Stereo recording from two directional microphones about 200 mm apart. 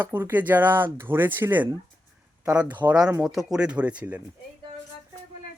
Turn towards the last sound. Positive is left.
turn(degrees=-5)  # may be behind; listen again after turning